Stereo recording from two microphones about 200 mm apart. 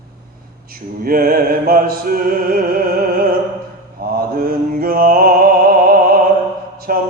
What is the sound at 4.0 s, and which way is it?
Mantra, 45° right (ahead or behind).